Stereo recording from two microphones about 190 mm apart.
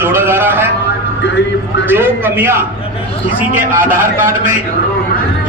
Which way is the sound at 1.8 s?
10° right (ahead or behind).